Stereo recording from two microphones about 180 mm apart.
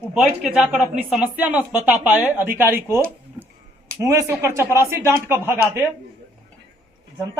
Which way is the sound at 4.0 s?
15° right (ahead or behind).